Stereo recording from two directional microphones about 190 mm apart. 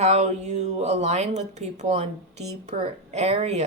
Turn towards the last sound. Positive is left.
turn(degrees=-35)  # may be behind; listen again after turning